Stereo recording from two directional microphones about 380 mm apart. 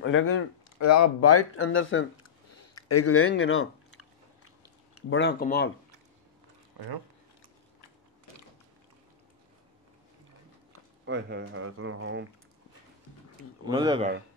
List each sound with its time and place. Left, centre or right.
0.0 s speech: left
2.5 s a sound: left
5.1 s speech: left
10.7 s speech: right
13.7 s speech: centre